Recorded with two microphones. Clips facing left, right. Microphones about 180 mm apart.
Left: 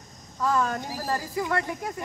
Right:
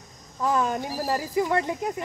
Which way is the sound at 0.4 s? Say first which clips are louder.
Right 1 dB; 15° right (ahead or behind).